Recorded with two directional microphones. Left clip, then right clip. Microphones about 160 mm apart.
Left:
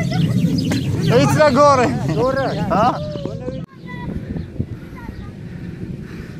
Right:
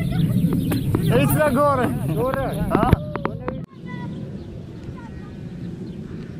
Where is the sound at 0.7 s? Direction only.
20° left (ahead or behind).